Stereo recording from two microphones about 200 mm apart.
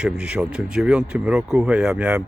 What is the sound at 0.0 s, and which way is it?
Speech, 5° right (ahead or behind).